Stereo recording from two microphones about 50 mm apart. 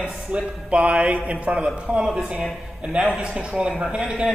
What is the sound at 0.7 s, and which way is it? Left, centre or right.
A man's voice, right.